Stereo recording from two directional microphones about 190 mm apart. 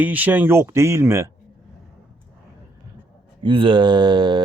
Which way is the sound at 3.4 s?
25° right (ahead or behind).